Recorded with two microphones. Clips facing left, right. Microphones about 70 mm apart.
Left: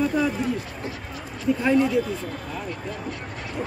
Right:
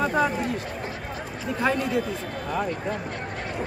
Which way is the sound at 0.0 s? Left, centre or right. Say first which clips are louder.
Even; right.